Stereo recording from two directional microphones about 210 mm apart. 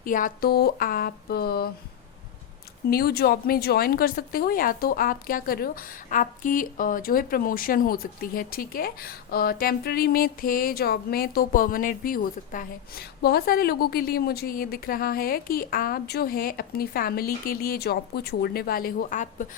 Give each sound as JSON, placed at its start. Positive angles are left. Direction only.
{"t": 0.0, "sound": "a woman's voice", "side_deg": 40}
{"t": 2.9, "sound": "a woman's voice", "side_deg": 50}